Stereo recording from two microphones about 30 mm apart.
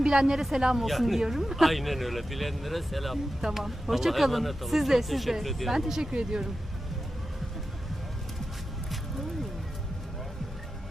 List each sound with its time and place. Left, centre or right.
0.0 s a woman's voice: right
0.8 s speech: centre
1.2 s speech: centre
6.0 s speech: right